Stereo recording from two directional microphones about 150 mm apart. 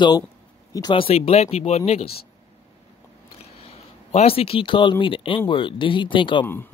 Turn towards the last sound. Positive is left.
turn(degrees=15)  # may be behind; listen again after turning